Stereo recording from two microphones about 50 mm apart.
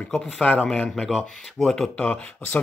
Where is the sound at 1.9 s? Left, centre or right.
Left.